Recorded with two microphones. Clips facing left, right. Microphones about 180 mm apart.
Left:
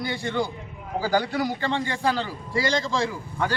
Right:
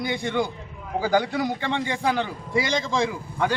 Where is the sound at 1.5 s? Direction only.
20° right (ahead or behind).